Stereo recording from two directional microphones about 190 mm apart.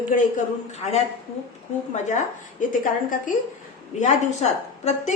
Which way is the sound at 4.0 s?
35° left (ahead or behind).